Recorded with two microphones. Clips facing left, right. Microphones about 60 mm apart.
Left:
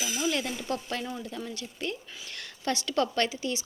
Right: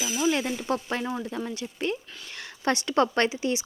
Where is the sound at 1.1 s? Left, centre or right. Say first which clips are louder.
Right 5 dB; right.